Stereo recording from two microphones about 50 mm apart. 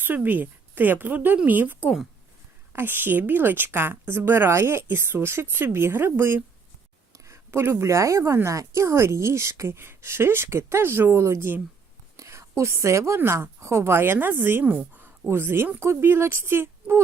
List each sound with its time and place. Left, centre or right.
0.0 s a woman's voice: right
9.7 s speech: right
12.2 s a sound: right
13.3 s a woman's voice: right
14.6 s a woman's voice: right
15.3 s speech: right